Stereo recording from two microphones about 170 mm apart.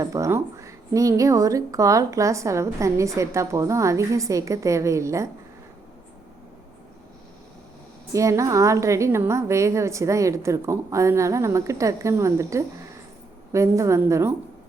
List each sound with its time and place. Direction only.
0.0 s a woman's voice: 20° right (ahead or behind)
8.1 s a woman's voice: 20° right (ahead or behind)